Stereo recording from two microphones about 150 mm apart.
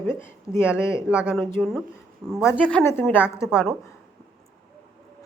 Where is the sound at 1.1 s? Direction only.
5° right (ahead or behind).